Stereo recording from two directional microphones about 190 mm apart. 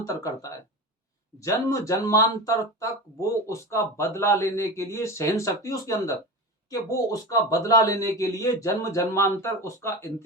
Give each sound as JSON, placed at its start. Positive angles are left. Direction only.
{"t": 0.0, "sound": "a man's voice", "side_deg": 15}